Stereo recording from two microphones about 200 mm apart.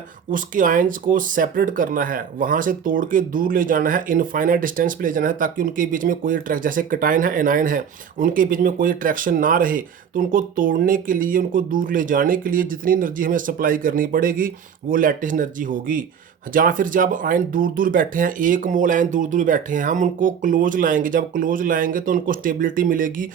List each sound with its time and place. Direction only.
0.3 s speech: 40° right (ahead or behind)